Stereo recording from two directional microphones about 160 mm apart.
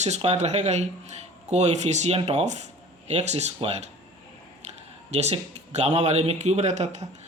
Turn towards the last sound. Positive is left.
turn(degrees=-45)  # may be behind; listen again after turning